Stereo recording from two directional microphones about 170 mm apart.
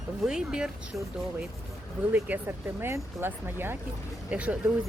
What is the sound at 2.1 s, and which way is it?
Speech, 10° right (ahead or behind).